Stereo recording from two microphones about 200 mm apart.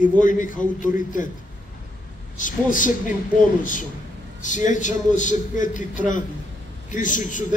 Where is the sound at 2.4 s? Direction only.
40° left (ahead or behind).